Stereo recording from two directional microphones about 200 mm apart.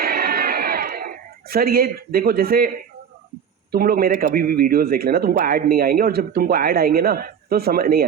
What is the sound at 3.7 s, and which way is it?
Speech, 45° right (ahead or behind).